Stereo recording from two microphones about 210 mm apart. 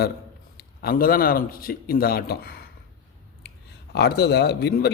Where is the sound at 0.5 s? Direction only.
45° left (ahead or behind).